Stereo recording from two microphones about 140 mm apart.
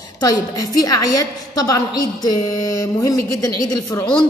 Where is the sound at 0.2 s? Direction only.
25° left (ahead or behind).